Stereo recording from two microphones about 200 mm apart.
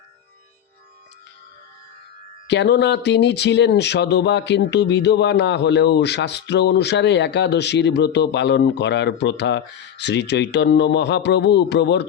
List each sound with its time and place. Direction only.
2.5 s speech: 60° left (ahead or behind)